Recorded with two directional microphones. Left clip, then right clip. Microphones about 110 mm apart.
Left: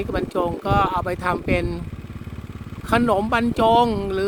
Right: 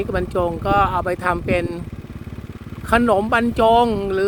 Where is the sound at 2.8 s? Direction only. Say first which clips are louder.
Right 3 dB; 10° right (ahead or behind).